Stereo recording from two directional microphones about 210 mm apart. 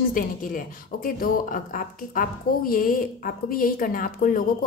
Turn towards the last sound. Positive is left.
turn(degrees=40)  # may be behind; listen again after turning